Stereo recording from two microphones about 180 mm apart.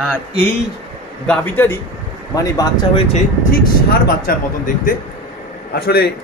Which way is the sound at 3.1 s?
50° left (ahead or behind).